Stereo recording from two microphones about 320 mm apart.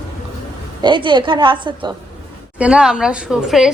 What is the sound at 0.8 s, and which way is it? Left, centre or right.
Speech, centre.